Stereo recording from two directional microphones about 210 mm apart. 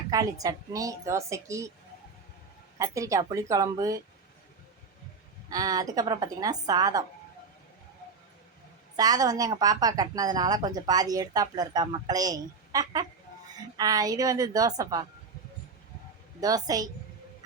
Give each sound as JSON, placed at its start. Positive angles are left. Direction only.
{"t": 0.1, "sound": "speech", "side_deg": -15}
{"t": 2.7, "sound": "speech", "side_deg": -15}
{"t": 5.5, "sound": "speech", "side_deg": -15}
{"t": 9.0, "sound": "speech", "side_deg": -15}
{"t": 16.4, "sound": "speech", "side_deg": -15}